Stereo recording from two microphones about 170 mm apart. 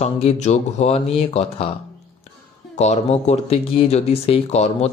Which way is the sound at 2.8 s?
40° left (ahead or behind).